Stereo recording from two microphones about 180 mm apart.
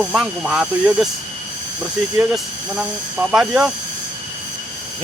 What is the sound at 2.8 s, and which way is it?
Speech, 5° right (ahead or behind).